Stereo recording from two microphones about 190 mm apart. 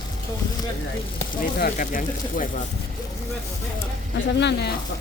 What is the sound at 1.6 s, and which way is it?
Speech, 45° left (ahead or behind).